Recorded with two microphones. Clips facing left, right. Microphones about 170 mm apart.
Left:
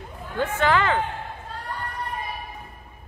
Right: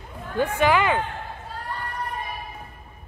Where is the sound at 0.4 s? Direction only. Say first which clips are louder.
Right 2 dB; 15° right (ahead or behind).